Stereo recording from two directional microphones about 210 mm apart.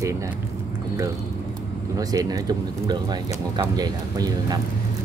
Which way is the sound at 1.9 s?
15° right (ahead or behind).